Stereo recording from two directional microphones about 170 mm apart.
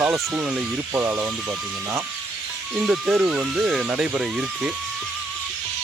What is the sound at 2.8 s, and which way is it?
Speech, 5° right (ahead or behind).